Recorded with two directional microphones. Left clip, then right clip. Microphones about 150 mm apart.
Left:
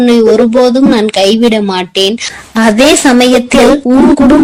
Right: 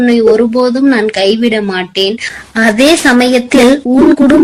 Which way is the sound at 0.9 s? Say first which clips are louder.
Left 2 dB; 45° left (ahead or behind).